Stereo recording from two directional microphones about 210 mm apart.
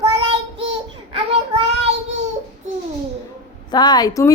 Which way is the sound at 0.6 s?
25° right (ahead or behind).